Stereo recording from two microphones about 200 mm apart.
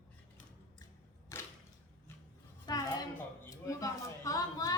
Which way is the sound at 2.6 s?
20° left (ahead or behind).